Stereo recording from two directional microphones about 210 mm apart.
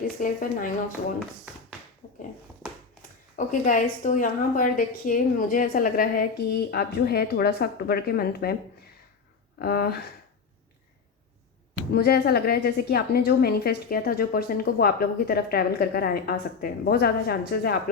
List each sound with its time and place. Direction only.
0.2 s speech: 40° left (ahead or behind)
2.0 s a sound: 35° left (ahead or behind)
3.3 s a woman's voice: 40° left (ahead or behind)
9.6 s a woman's voice: 45° left (ahead or behind)
11.9 s a woman's voice: 50° left (ahead or behind)